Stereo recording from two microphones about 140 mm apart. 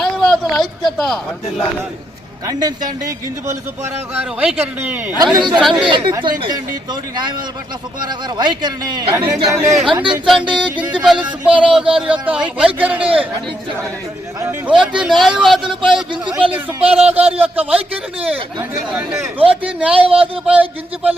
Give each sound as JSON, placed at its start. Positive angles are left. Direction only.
{"t": 0.0, "sound": "a sound", "side_deg": 5}
{"t": 2.5, "sound": "speech", "side_deg": -30}
{"t": 4.1, "sound": "music", "side_deg": -10}
{"t": 5.1, "sound": "speech", "side_deg": -30}
{"t": 8.0, "sound": "speech", "side_deg": -30}
{"t": 9.9, "sound": "speech", "side_deg": -35}
{"t": 10.5, "sound": "music", "side_deg": -10}
{"t": 14.7, "sound": "a man's voice", "side_deg": -5}
{"t": 16.4, "sound": "speech", "side_deg": -45}
{"t": 17.4, "sound": "music", "side_deg": -10}
{"t": 19.1, "sound": "speech", "side_deg": -20}
{"t": 19.5, "sound": "music", "side_deg": -10}